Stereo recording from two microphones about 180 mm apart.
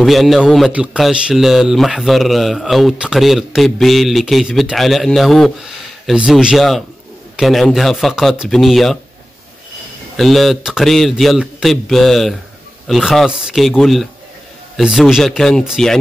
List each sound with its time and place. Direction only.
0.0 s speech: centre (ahead or behind)
10.1 s speech: centre (ahead or behind)